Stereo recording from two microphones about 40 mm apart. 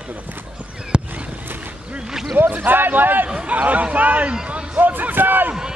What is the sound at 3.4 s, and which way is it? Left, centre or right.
Speech, right.